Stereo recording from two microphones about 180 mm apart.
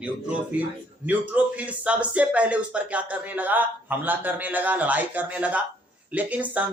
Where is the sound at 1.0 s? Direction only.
10° right (ahead or behind).